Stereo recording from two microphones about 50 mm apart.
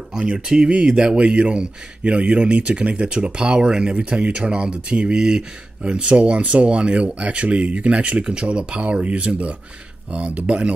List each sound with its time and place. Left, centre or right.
0.1 s speech: centre